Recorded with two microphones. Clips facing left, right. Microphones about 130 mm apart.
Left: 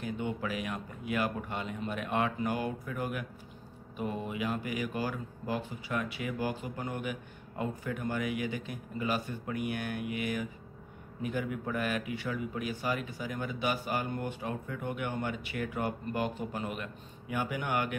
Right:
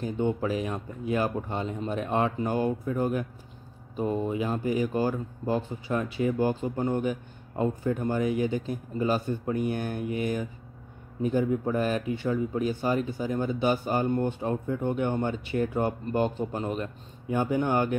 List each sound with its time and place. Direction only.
0.0 s speech: 35° right (ahead or behind)